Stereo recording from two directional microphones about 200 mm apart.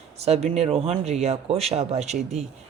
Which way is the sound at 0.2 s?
30° right (ahead or behind).